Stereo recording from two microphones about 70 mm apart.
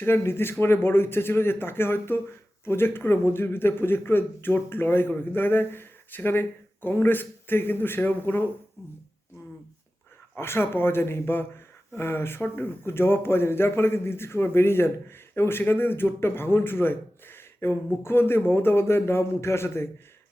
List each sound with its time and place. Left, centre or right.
0.0 s speech: left
10.3 s speech: left